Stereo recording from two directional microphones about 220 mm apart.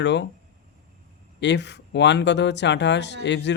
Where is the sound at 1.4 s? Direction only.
50° left (ahead or behind).